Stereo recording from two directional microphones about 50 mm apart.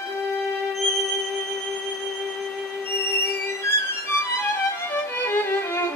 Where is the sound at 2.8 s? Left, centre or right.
Left.